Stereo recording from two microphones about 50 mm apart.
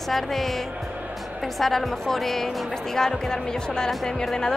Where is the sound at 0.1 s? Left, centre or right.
Centre.